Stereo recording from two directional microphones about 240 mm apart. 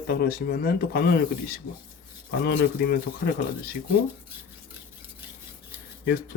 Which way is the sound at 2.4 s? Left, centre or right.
Left.